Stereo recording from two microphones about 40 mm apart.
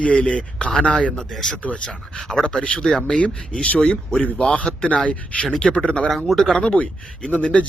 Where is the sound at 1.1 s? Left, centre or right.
Centre; by 2.8 s left.